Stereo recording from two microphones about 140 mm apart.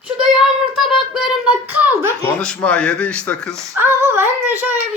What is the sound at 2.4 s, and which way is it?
Speech, 5° left (ahead or behind).